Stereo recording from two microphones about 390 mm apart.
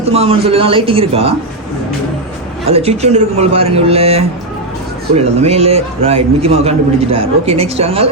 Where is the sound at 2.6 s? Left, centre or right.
Centre.